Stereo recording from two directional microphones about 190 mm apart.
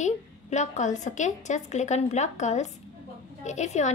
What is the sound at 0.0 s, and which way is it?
A woman's voice, 40° left (ahead or behind).